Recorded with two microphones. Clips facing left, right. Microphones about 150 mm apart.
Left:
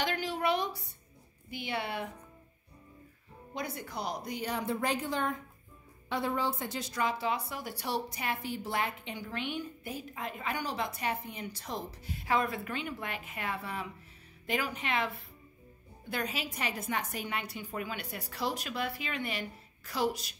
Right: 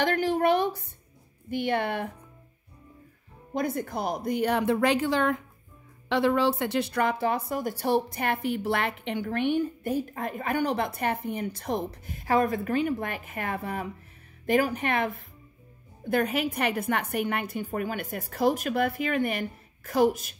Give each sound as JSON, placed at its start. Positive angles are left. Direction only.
{"t": 0.0, "sound": "a sound", "side_deg": -50}
{"t": 1.5, "sound": "a woman's voice", "side_deg": -55}
{"t": 3.5, "sound": "a woman's voice", "side_deg": -50}